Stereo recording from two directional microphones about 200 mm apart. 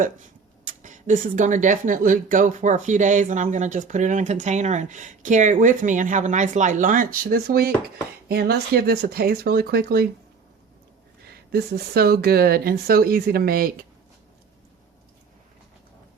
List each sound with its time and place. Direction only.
0.6 s speech: 40° right (ahead or behind)
11.3 s speech: 50° right (ahead or behind)